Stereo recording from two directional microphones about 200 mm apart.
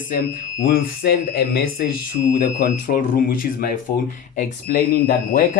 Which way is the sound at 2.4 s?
40° left (ahead or behind).